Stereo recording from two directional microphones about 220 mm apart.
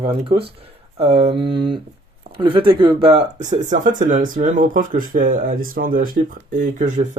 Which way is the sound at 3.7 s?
35° right (ahead or behind).